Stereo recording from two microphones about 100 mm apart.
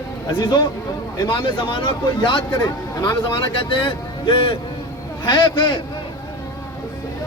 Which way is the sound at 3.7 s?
55° left (ahead or behind).